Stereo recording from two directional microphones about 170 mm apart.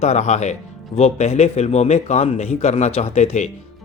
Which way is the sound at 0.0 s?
40° left (ahead or behind).